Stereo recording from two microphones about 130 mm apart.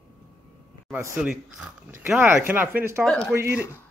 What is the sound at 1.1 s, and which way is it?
Speech, 10° right (ahead or behind).